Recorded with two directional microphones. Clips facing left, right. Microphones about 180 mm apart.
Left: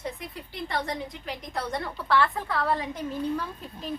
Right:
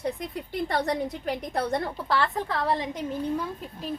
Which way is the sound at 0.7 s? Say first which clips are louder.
Right 3 dB; 50° right (ahead or behind).